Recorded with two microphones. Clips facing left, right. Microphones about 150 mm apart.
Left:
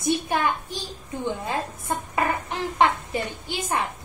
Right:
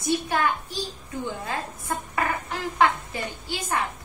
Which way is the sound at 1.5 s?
20° left (ahead or behind).